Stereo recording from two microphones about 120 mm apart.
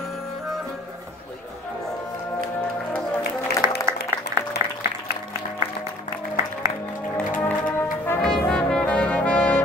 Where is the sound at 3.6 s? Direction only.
30° right (ahead or behind).